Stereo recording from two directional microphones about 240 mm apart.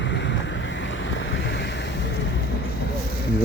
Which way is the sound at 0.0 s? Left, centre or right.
Left.